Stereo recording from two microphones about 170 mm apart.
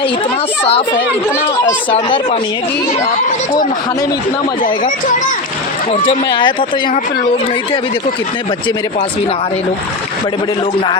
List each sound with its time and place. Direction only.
1.9 s speech: 30° left (ahead or behind)
6.1 s speech: 30° left (ahead or behind)